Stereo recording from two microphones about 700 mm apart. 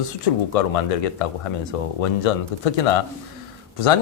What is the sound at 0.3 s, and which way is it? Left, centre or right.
Speech, left.